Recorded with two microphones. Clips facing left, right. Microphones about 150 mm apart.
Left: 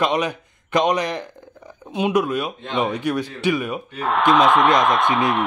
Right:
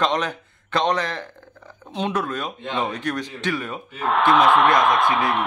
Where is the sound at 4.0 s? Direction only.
Centre (ahead or behind).